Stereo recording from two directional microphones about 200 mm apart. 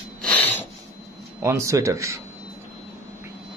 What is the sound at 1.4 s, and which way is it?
Speech, 15° right (ahead or behind).